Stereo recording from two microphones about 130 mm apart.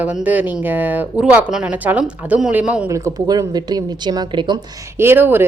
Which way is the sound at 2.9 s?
25° right (ahead or behind).